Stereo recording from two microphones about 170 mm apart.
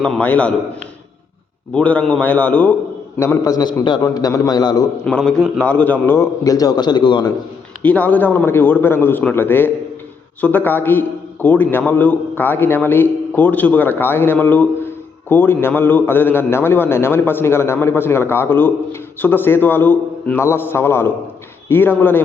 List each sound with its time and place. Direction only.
0.0 s a man's voice: 5° left (ahead or behind)
1.7 s a man's voice: 5° left (ahead or behind)
3.2 s a man's voice: 20° left (ahead or behind)
5.0 s a man's voice: 5° left (ahead or behind); by 7.3 s 25° left (ahead or behind)
7.8 s a man's voice: 10° left (ahead or behind)